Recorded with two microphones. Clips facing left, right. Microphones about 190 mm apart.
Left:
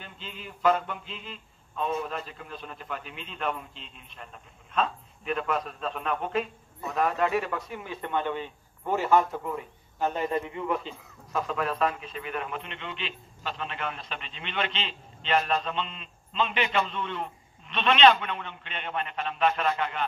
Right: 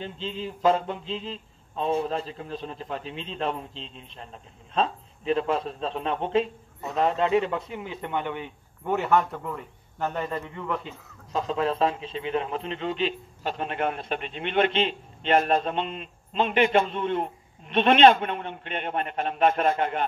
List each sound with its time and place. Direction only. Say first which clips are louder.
0.0 s speech: right 10 dB; 30° right (ahead or behind)
8.8 s a man's voice: even; 5° left (ahead or behind)
9.9 s speech: left 2 dB; 15° left (ahead or behind)
11.3 s a man's voice: right 3 dB; 25° right (ahead or behind); by 20.1 s 50° right (ahead or behind)